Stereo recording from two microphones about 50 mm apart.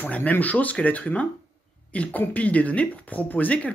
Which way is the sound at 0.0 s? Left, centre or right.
Left.